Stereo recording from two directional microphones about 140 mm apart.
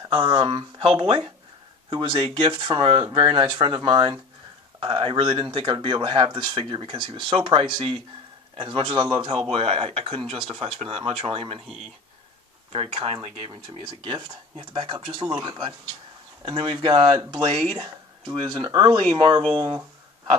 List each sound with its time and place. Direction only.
0.0 s speech: 35° right (ahead or behind)
12.7 s speech: 45° right (ahead or behind); by 19.8 s 25° right (ahead or behind)